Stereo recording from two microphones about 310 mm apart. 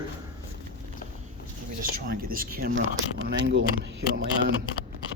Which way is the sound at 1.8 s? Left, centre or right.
Right.